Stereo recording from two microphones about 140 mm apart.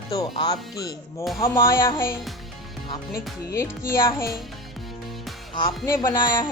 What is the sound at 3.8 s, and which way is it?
Speech, 20° left (ahead or behind).